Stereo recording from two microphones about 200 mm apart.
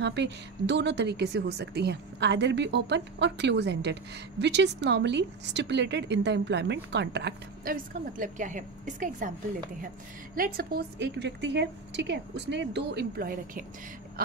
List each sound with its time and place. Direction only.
0.0 s a woman's voice: 60° right (ahead or behind); by 9.3 s 40° right (ahead or behind)
10.3 s a woman's voice: 45° right (ahead or behind)